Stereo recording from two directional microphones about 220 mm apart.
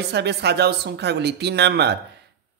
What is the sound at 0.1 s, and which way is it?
Speech, 50° right (ahead or behind).